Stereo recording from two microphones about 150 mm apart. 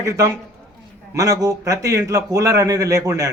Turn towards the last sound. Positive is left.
turn(degrees=-20)  # may be behind; listen again after turning